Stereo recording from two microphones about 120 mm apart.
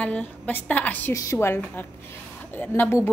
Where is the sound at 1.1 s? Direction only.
25° left (ahead or behind).